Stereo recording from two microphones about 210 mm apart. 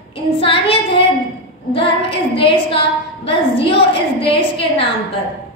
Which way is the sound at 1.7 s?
25° left (ahead or behind).